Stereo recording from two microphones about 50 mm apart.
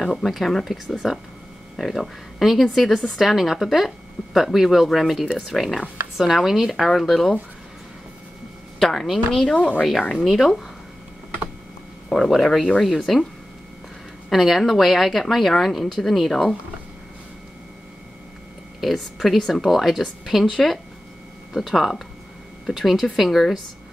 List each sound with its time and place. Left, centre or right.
0.0 s speech: centre
1.0 s speech: centre
8.7 s speech: centre
9.6 s speech: left
10.3 s speech: centre
12.1 s speech: centre
14.3 s speech: centre
18.8 s speech: centre